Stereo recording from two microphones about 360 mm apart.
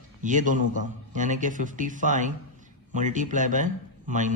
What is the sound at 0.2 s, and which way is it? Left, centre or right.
Speech, right.